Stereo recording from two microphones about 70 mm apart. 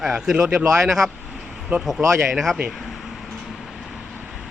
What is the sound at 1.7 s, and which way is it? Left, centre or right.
Speech, right.